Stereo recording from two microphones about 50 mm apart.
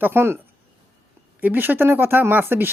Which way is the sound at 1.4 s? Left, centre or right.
Right.